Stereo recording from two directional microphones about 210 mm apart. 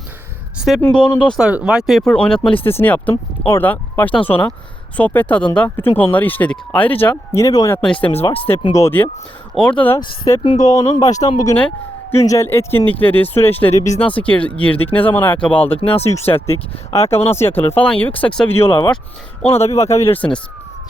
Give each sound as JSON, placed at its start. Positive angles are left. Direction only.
{"t": 0.8, "sound": "speech", "side_deg": 5}
{"t": 8.3, "sound": "speech", "side_deg": 25}
{"t": 8.7, "sound": "speech", "side_deg": 10}
{"t": 10.0, "sound": "speech", "side_deg": 20}
{"t": 15.5, "sound": "speech", "side_deg": 25}
{"t": 17.3, "sound": "speech", "side_deg": 10}
{"t": 18.7, "sound": "speech", "side_deg": 20}
{"t": 19.7, "sound": "speech", "side_deg": 15}